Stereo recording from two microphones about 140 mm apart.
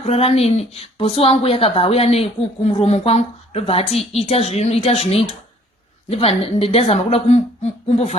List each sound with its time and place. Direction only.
0.0 s speech: 45° left (ahead or behind)